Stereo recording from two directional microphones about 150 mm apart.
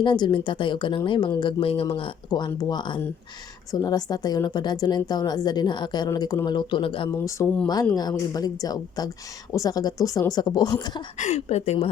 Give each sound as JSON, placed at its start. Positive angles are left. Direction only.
{"t": 0.0, "sound": "a woman's voice", "side_deg": 30}
{"t": 7.1, "sound": "a woman's voice", "side_deg": 20}
{"t": 11.2, "sound": "speech", "side_deg": 45}